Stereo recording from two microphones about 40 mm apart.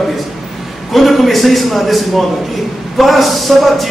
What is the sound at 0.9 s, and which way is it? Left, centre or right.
A man's voice, centre.